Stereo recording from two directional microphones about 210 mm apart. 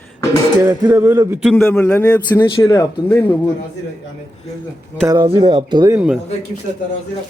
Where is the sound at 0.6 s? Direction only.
10° right (ahead or behind).